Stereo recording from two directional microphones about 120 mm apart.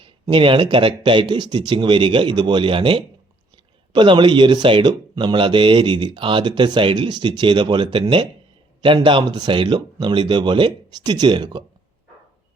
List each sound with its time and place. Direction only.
0.0 s speech: 45° right (ahead or behind)